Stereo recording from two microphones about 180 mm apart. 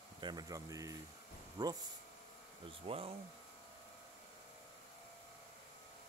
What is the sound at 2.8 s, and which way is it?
Speech, 30° right (ahead or behind).